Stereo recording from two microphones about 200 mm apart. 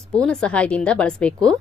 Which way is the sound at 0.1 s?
5° left (ahead or behind).